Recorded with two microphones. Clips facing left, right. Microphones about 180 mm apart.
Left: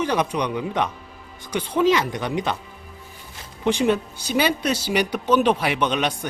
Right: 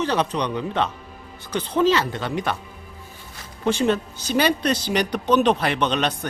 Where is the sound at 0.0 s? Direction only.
10° left (ahead or behind).